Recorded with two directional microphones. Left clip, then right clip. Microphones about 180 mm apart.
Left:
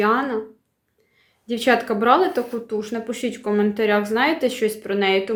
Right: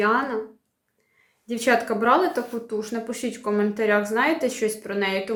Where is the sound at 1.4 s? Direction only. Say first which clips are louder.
Left 2 dB; 30° left (ahead or behind).